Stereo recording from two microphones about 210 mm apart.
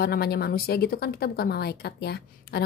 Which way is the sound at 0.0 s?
50° left (ahead or behind).